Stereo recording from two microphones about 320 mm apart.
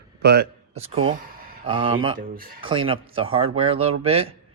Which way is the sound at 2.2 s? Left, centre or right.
Right.